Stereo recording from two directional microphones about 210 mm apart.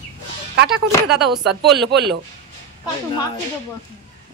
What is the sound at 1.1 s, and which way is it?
Speech, centre (ahead or behind).